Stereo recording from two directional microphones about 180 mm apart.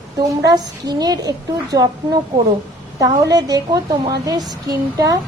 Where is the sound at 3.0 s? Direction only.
20° right (ahead or behind).